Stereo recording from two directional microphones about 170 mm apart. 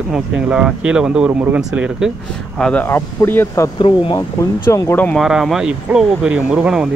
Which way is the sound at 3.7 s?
30° left (ahead or behind).